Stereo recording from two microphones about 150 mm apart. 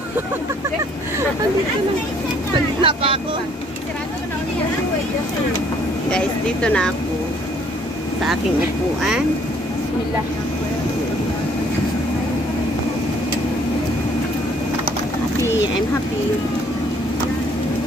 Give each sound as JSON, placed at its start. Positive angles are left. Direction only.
{"t": 2.5, "sound": "speech", "side_deg": -35}
{"t": 6.1, "sound": "speech", "side_deg": 5}